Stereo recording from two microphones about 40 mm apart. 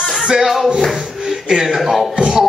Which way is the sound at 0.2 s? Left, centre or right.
Centre.